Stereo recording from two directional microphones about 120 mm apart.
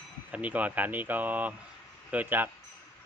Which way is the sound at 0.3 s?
10° right (ahead or behind).